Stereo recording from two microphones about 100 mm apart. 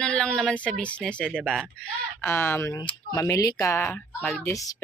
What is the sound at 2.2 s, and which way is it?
A woman's voice, 25° left (ahead or behind).